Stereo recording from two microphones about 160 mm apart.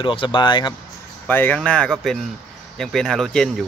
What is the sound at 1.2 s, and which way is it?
Speech, 10° left (ahead or behind).